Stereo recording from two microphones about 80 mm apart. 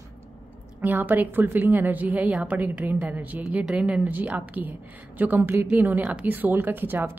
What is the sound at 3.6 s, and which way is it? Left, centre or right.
Speech, centre.